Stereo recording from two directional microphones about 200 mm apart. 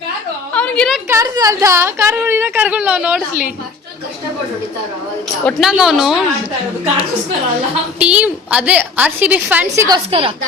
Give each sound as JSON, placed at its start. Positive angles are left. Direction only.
{"t": 0.5, "sound": "a sound", "side_deg": 5}
{"t": 1.0, "sound": "a woman's voice", "side_deg": -15}
{"t": 5.5, "sound": "speech", "side_deg": 0}
{"t": 7.9, "sound": "a woman's voice", "side_deg": -5}
{"t": 10.1, "sound": "a woman's voice", "side_deg": -25}